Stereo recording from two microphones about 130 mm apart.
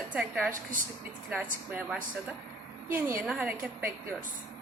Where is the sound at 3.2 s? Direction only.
5° right (ahead or behind).